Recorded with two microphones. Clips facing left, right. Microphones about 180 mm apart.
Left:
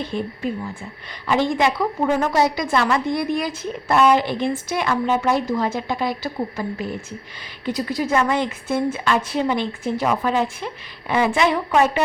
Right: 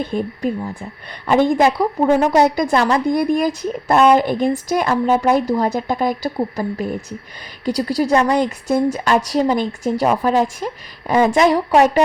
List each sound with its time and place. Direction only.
0.0 s a woman's voice: 45° right (ahead or behind)
1.3 s a woman's voice: 50° right (ahead or behind)
1.8 s a woman's voice: 35° right (ahead or behind)
2.2 s a woman's voice: 55° right (ahead or behind)
2.6 s a woman's voice: 40° right (ahead or behind)